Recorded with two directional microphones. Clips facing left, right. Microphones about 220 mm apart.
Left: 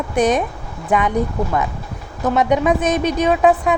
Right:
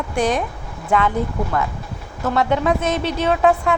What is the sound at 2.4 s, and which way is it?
A woman's voice, 15° left (ahead or behind).